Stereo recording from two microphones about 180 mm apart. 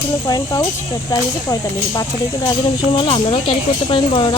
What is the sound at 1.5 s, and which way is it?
Speech, 20° left (ahead or behind).